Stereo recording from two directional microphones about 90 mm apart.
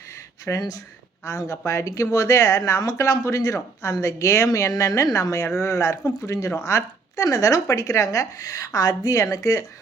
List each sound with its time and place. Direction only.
0.5 s speech: 25° left (ahead or behind)
1.2 s speech: 35° left (ahead or behind)